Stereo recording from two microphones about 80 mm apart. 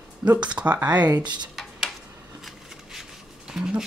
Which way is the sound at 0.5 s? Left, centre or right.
Centre.